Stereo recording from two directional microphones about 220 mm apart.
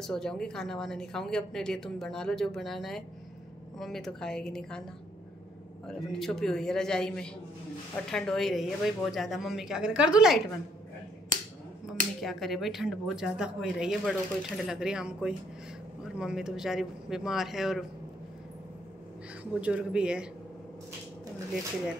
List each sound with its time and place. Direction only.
0.0 s a woman's voice: 5° left (ahead or behind)
5.9 s a woman's voice: centre (ahead or behind)
11.3 s a sound: 40° right (ahead or behind)
12.2 s a woman's voice: centre (ahead or behind)
19.6 s a woman's voice: 5° right (ahead or behind)